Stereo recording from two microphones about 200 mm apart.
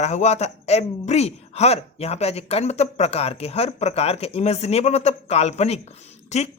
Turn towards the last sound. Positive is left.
turn(degrees=35)  # may be behind; listen again after turning